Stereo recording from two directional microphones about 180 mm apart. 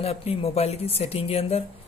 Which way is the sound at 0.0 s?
35° left (ahead or behind).